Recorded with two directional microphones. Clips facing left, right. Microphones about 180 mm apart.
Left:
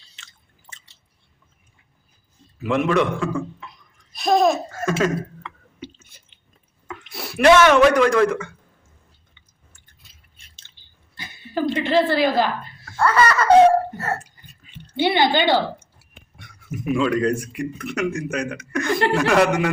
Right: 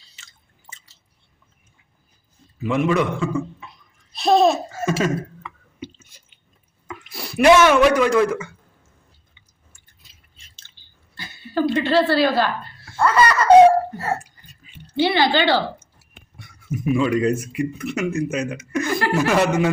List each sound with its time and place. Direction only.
2.6 s speech: centre (ahead or behind)
4.1 s babbling: 30° right (ahead or behind)
4.7 s a sound: 5° right (ahead or behind)
7.4 s a man's voice: 10° right (ahead or behind)
11.2 s a sound: 20° left (ahead or behind)
12.8 s speech: 15° right (ahead or behind)
14.6 s a sound: 10° right (ahead or behind)
15.1 s speech: 20° left (ahead or behind)
16.4 s speech: centre (ahead or behind)